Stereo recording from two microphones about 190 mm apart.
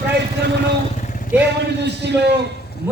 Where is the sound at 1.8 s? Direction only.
65° right (ahead or behind).